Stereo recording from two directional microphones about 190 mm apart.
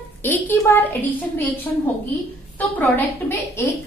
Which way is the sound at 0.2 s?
10° left (ahead or behind).